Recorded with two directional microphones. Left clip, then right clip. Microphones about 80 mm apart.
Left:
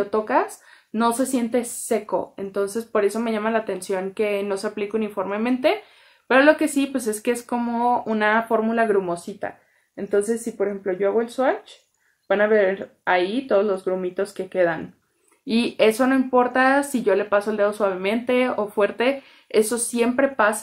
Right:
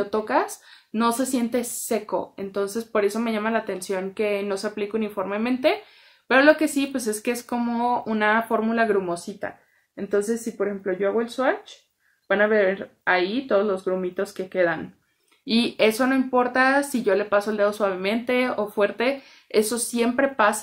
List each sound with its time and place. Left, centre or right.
0.0 s speech: right
9.9 s a woman's voice: right
15.4 s speech: centre
20.1 s speech: right